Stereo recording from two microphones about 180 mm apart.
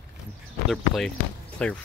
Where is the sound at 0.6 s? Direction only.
Centre (ahead or behind).